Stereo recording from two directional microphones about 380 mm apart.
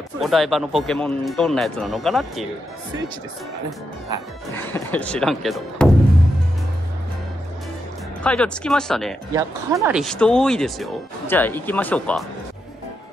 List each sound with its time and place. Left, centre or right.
0.2 s speech: centre
4.6 s speech: centre
8.2 s speech: centre